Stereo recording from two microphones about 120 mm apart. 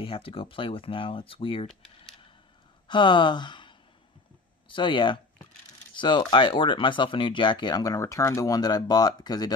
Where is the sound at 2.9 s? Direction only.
40° left (ahead or behind).